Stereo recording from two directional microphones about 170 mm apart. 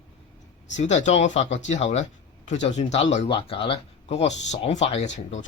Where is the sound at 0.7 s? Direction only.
40° left (ahead or behind).